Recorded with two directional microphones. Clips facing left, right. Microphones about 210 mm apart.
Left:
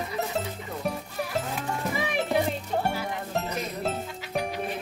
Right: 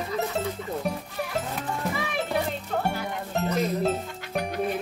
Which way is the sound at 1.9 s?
15° left (ahead or behind).